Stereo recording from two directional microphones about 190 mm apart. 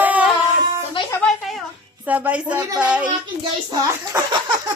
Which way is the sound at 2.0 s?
10° right (ahead or behind).